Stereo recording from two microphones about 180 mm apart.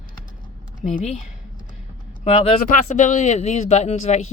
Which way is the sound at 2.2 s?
35° left (ahead or behind).